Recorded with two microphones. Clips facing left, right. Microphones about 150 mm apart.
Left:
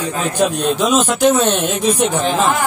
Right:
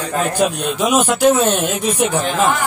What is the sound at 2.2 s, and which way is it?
Speech, 40° left (ahead or behind).